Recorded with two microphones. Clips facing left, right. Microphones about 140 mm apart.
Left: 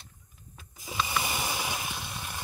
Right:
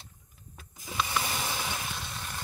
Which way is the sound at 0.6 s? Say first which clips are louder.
Even; centre (ahead or behind).